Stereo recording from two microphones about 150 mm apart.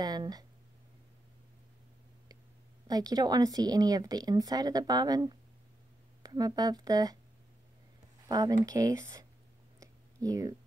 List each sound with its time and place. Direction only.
0.0 s speech: 25° right (ahead or behind)
2.9 s speech: 25° right (ahead or behind)
8.3 s speech: 25° right (ahead or behind)
9.8 s a sound: 20° right (ahead or behind)